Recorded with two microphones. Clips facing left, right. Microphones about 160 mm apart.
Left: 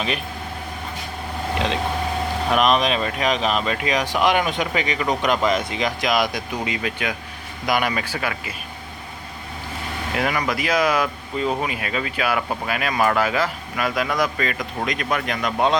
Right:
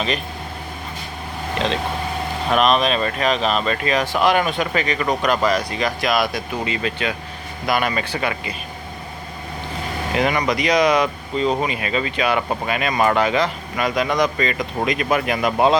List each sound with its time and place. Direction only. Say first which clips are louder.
1.5 s speech: right 1 dB; 15° left (ahead or behind)
10.2 s speech: right 3 dB; centre (ahead or behind)